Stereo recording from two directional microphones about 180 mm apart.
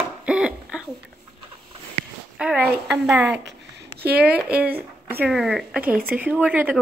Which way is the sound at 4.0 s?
60° right (ahead or behind).